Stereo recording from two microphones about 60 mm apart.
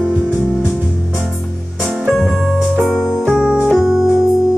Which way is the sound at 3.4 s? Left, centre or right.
Right.